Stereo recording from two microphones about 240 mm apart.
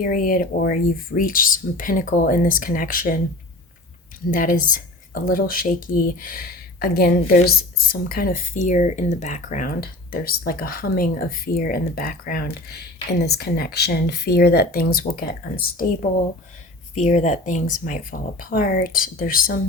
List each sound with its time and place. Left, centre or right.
0.0 s speech: left
4.3 s speech: left
16.9 s speech: left